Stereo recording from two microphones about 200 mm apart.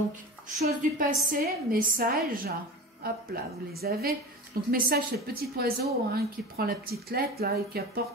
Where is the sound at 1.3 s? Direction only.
45° right (ahead or behind).